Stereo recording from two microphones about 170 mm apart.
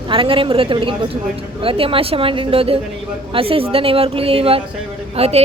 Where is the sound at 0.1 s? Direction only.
30° right (ahead or behind).